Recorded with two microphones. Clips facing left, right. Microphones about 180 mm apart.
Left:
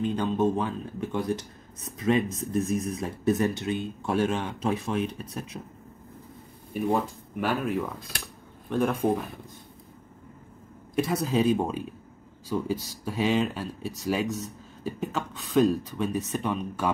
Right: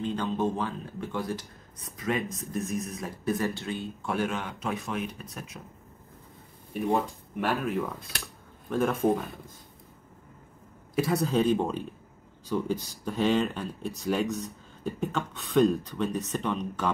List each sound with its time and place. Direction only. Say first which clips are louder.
0.0 s speech: left 3 dB; 15° left (ahead or behind)
6.7 s speech: left 1 dB; centre (ahead or behind)
11.0 s speech: even; centre (ahead or behind)